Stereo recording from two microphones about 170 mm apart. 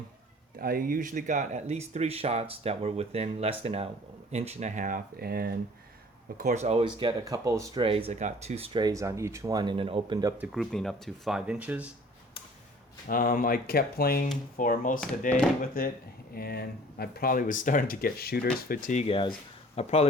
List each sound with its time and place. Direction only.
0.6 s speech: 60° right (ahead or behind)
6.3 s speech: 45° right (ahead or behind); by 10.3 s 25° right (ahead or behind)
10.3 s speech: 5° right (ahead or behind)
13.1 s speech: 55° left (ahead or behind); by 20.1 s 35° left (ahead or behind)